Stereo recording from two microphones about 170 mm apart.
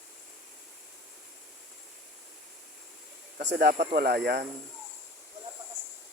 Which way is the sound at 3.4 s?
65° right (ahead or behind).